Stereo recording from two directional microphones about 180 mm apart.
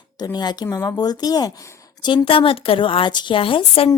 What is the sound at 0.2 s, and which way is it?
Speech, 20° left (ahead or behind).